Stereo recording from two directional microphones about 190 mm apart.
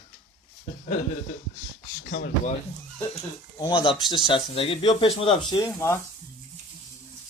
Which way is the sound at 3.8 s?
25° left (ahead or behind).